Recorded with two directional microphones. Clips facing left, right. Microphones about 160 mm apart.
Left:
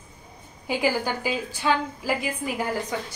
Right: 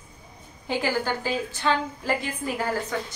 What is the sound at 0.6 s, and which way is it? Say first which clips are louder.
A woman's voice: left 1 dB; 10° left (ahead or behind).